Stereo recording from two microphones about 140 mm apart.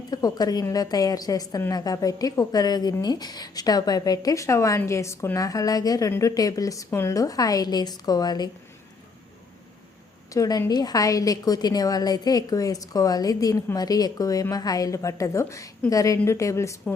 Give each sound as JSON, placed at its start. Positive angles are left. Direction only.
{"t": 0.1, "sound": "a woman's voice", "side_deg": 25}
{"t": 10.3, "sound": "a woman's voice", "side_deg": 25}